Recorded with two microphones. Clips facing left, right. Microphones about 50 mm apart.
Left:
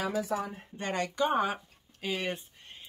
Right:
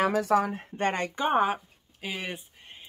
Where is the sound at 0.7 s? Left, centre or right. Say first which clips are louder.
Right 2 dB; right.